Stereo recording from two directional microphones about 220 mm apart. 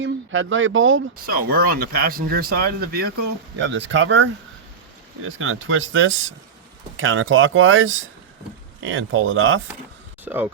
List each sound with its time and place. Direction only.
0.0 s speech: 60° right (ahead or behind)
1.1 s speech: 40° right (ahead or behind); by 9.6 s 65° right (ahead or behind)
10.2 s speech: 10° right (ahead or behind)